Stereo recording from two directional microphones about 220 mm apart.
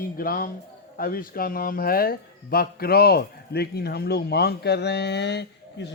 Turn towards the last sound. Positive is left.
turn(degrees=50)  # may be behind; listen again after turning